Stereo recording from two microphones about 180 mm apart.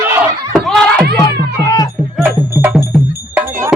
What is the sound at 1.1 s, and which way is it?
Cat, 20° left (ahead or behind).